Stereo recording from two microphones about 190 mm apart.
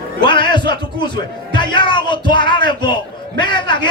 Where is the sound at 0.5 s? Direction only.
25° left (ahead or behind).